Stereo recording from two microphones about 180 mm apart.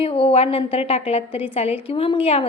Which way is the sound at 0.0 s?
30° left (ahead or behind).